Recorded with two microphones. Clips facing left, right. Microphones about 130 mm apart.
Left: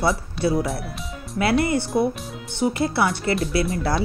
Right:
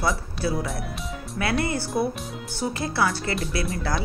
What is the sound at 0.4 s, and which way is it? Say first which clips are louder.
Speech: left 5 dB; 25° left (ahead or behind).